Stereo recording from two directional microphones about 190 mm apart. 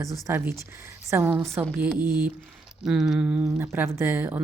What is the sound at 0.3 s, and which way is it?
Speech, 15° right (ahead or behind).